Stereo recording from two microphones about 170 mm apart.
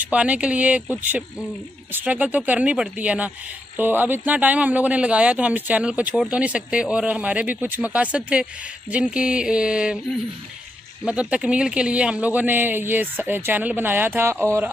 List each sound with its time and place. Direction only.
0.0 s speech: 10° right (ahead or behind)
8.9 s a sound: 5° right (ahead or behind)
11.1 s speech: 5° right (ahead or behind)